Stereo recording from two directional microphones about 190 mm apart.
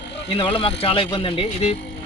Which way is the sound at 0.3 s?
25° left (ahead or behind).